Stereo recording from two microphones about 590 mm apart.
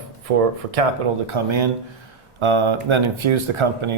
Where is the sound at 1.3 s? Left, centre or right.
Right.